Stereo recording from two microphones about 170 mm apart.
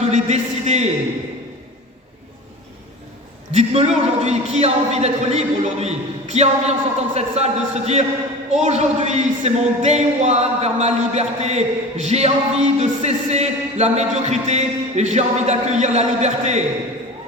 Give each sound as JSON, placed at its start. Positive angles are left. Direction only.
{"t": 0.0, "sound": "a man's voice", "side_deg": -40}
{"t": 3.5, "sound": "a man's voice", "side_deg": -40}